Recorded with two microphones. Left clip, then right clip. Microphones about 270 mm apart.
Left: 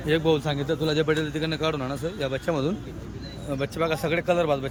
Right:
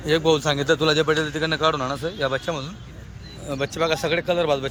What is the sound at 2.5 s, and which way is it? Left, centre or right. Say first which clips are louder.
Speech: left 2 dB; left.